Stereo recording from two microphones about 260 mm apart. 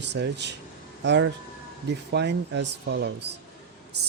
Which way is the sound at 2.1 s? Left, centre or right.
Right.